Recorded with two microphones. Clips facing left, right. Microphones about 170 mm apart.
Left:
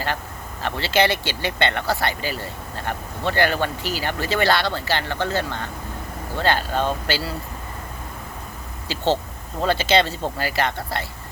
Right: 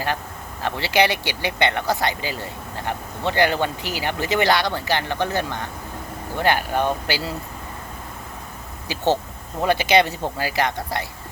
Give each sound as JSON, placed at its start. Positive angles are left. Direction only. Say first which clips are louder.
{"t": 0.6, "sound": "speech", "louder": "even", "side_deg": -15}
{"t": 8.9, "sound": "speech", "louder": "right 1 dB", "side_deg": -15}